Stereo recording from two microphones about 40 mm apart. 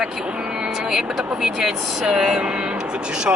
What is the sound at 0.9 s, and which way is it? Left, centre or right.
Speech, centre.